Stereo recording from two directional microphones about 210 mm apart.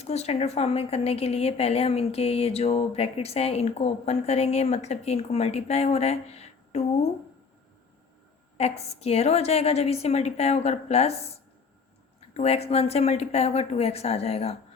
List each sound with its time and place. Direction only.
0.0 s speech: 30° left (ahead or behind)
8.5 s speech: 30° left (ahead or behind)
12.3 s speech: 30° left (ahead or behind)